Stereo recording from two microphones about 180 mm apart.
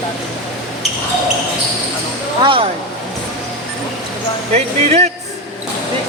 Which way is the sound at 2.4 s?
30° right (ahead or behind).